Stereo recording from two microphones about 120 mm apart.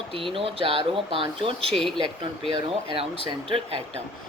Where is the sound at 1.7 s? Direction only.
5° left (ahead or behind).